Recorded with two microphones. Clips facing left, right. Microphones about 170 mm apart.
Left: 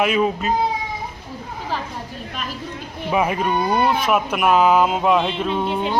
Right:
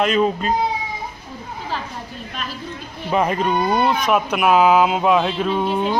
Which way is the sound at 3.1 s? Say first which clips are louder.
Right 1 dB; 5° left (ahead or behind).